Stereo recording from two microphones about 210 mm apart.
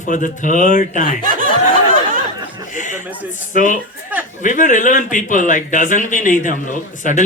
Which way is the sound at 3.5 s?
40° left (ahead or behind).